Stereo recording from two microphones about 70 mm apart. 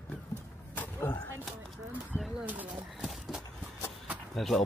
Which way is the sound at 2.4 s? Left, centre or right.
Right.